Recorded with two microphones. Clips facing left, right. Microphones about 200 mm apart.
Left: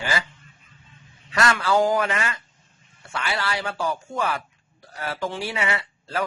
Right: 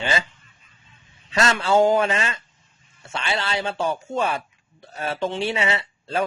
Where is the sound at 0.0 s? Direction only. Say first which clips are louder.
Right 2 dB; 25° right (ahead or behind).